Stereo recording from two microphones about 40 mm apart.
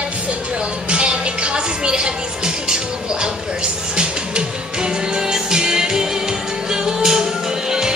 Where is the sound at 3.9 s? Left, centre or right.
Right.